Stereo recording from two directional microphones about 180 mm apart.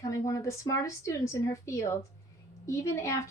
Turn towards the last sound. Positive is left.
turn(degrees=15)  # may be behind; listen again after turning